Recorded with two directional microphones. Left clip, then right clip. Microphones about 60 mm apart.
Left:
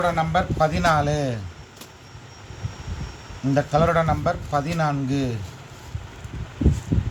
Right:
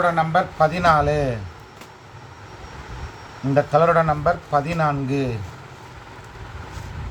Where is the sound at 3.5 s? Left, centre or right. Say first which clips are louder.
Right 4 dB; centre.